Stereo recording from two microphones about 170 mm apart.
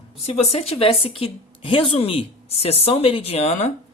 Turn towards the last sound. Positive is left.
turn(degrees=35)  # may be behind; listen again after turning